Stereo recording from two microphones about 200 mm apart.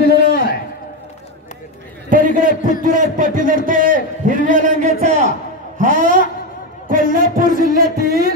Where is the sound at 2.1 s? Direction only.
40° right (ahead or behind).